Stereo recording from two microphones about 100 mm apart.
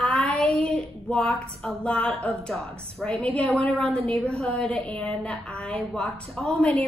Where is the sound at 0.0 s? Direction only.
10° left (ahead or behind).